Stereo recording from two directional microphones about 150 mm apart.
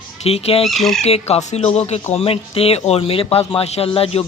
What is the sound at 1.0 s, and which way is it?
Speech, 45° left (ahead or behind).